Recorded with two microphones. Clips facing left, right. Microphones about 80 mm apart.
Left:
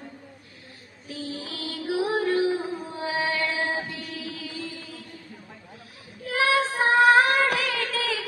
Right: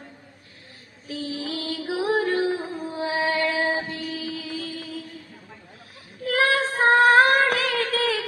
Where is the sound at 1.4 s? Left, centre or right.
Right.